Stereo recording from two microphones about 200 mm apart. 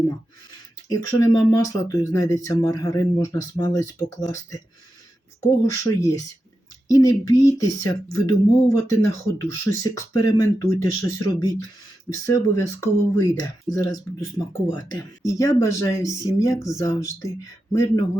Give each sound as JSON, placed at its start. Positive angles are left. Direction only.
{"t": 0.9, "sound": "speech", "side_deg": 15}
{"t": 5.4, "sound": "speech", "side_deg": 15}